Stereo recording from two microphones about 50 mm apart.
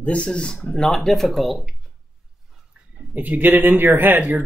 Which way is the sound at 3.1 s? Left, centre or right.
Right.